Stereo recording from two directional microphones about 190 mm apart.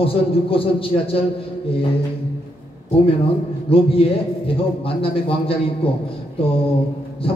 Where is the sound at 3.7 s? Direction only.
30° left (ahead or behind).